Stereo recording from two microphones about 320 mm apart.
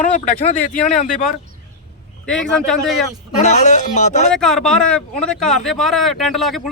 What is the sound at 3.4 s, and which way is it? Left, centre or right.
Speech, left.